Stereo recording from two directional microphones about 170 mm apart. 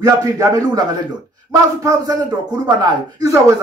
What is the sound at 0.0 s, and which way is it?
Speech, 20° right (ahead or behind).